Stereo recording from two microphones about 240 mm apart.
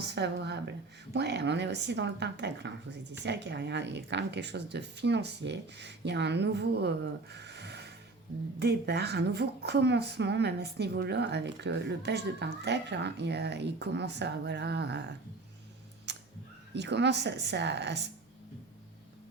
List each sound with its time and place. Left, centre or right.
0.0 s speech: right
16.7 s speech: right